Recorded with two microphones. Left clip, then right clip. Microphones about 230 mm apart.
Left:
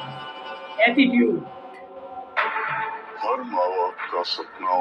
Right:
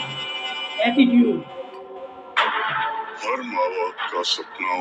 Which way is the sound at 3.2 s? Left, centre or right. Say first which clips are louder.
Left 2 dB; right.